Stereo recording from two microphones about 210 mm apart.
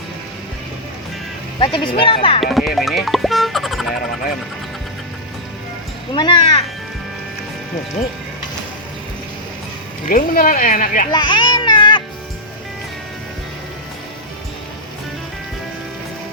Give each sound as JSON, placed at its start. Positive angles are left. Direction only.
{"t": 1.5, "sound": "speech", "side_deg": 20}
{"t": 2.4, "sound": "speech", "side_deg": 0}
{"t": 6.1, "sound": "speech", "side_deg": 20}
{"t": 10.1, "sound": "speech", "side_deg": 40}
{"t": 11.1, "sound": "music", "side_deg": 20}